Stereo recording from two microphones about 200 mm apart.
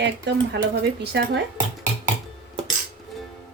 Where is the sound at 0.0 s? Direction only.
55° right (ahead or behind).